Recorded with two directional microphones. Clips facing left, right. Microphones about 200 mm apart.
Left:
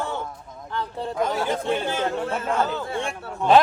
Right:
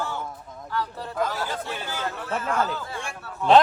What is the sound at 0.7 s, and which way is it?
A man's voice, 20° left (ahead or behind).